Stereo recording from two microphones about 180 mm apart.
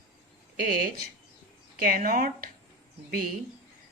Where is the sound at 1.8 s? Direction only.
50° right (ahead or behind).